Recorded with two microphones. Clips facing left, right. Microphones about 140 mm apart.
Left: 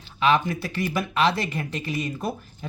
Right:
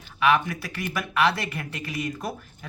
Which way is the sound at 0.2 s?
25° left (ahead or behind).